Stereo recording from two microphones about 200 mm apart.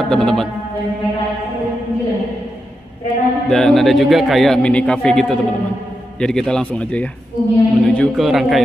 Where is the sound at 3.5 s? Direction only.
Centre (ahead or behind).